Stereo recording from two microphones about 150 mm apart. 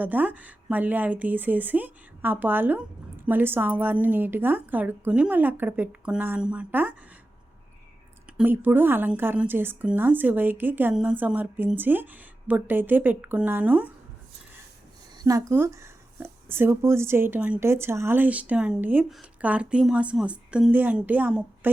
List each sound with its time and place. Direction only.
0.0 s speech: 10° right (ahead or behind)
8.4 s speech: 10° right (ahead or behind)
15.2 s speech: 20° right (ahead or behind)